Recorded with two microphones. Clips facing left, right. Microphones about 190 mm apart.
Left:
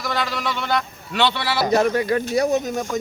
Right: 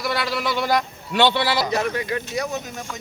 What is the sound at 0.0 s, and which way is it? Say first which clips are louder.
A man's voice: right 1 dB; 10° right (ahead or behind).